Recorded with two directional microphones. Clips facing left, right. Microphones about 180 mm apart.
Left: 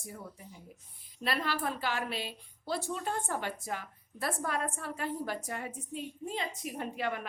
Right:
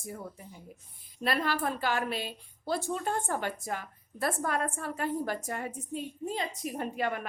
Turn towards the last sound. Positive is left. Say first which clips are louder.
# right 3 dB
turn(degrees=-45)  # may be behind; listen again after turning